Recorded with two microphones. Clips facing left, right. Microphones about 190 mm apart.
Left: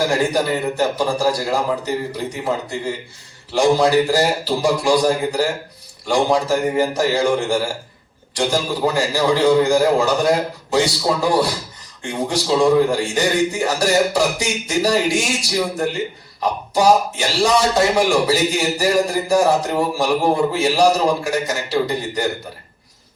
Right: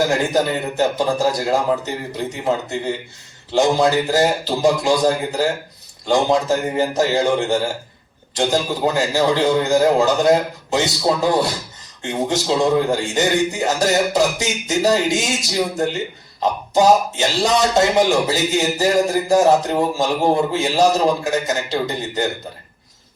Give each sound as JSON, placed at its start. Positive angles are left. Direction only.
{"t": 0.0, "sound": "speech", "side_deg": -20}